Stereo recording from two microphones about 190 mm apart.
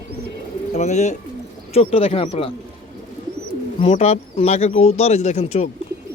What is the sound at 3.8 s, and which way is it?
Speech, 35° left (ahead or behind).